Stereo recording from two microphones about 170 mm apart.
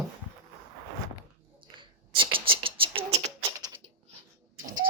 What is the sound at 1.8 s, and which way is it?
Beatboxing, 30° right (ahead or behind).